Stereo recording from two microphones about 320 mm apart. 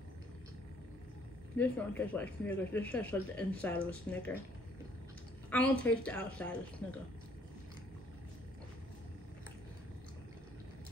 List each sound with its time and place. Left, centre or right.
1.6 s speech: centre
5.5 s speech: centre